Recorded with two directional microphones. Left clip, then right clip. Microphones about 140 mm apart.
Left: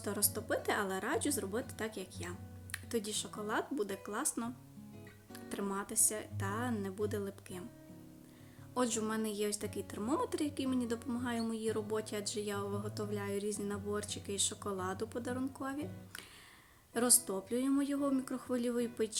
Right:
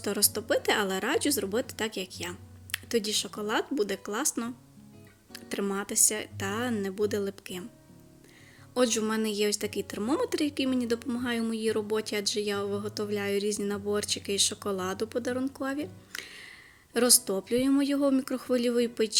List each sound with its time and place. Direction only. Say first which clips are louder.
0.0 s a woman's voice: right 9 dB; 25° right (ahead or behind)
8.7 s a woman's voice: right 9 dB; 20° right (ahead or behind)